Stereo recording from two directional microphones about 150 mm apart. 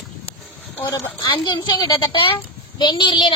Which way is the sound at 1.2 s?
30° left (ahead or behind).